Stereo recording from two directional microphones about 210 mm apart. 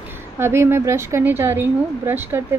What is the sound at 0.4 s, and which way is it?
Speech, 10° right (ahead or behind).